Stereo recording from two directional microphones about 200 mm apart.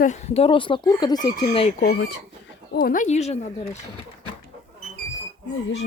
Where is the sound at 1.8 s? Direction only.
55° left (ahead or behind).